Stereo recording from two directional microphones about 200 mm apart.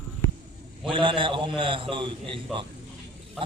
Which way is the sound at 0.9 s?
25° right (ahead or behind).